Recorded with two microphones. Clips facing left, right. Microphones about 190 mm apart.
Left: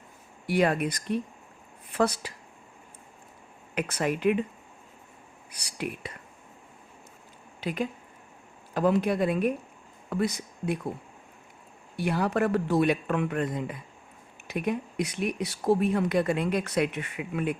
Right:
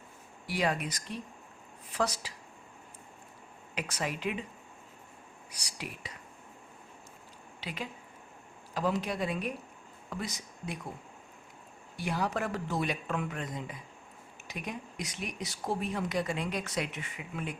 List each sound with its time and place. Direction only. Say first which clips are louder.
0.4 s a woman's voice: left 7 dB; 55° left (ahead or behind)
3.8 s speech: left 8 dB; 55° left (ahead or behind)
5.5 s speech: left 9 dB; 55° left (ahead or behind)
7.6 s speech: left 10 dB; 50° left (ahead or behind)
11.9 s speech: left 7 dB; 60° left (ahead or behind)